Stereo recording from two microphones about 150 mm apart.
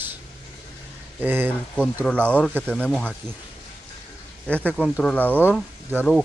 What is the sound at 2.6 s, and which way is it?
Speech, 10° left (ahead or behind).